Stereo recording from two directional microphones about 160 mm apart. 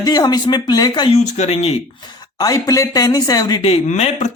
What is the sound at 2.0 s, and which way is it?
Speech, 25° left (ahead or behind).